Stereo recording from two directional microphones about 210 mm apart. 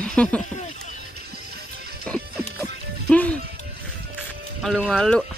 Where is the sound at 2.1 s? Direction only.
5° left (ahead or behind).